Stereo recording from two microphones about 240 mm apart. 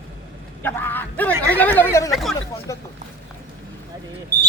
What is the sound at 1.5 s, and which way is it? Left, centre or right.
Speech, centre.